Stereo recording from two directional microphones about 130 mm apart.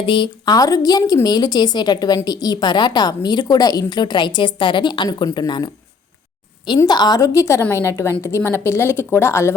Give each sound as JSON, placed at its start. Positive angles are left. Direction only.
{"t": 0.0, "sound": "a woman's voice", "side_deg": 40}
{"t": 6.7, "sound": "a woman's voice", "side_deg": 30}